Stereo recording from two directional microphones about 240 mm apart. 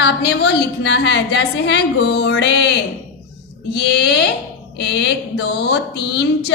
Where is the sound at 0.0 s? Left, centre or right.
Left.